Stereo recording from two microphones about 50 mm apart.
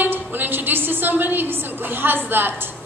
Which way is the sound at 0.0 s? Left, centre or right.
Right.